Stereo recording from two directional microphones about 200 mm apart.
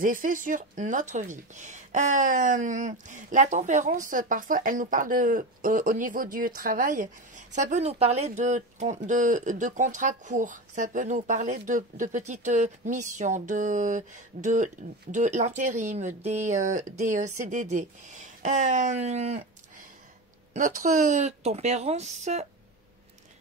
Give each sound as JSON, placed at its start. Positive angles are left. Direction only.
{"t": 0.0, "sound": "speech", "side_deg": -40}
{"t": 20.5, "sound": "speech", "side_deg": -40}